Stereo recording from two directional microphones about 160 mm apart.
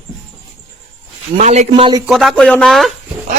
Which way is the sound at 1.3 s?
50° right (ahead or behind).